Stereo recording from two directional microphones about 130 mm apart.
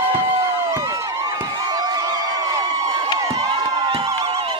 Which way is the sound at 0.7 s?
25° right (ahead or behind).